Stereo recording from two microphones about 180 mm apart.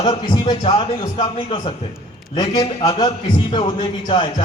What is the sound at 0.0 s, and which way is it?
A man's voice, 25° left (ahead or behind).